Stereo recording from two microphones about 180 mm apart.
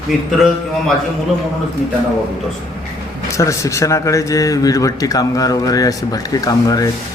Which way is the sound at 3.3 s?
15° left (ahead or behind).